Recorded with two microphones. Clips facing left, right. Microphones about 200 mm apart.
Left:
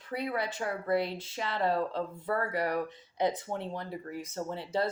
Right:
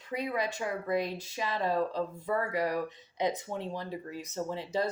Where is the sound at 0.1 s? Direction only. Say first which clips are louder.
Right 1 dB; 15° right (ahead or behind).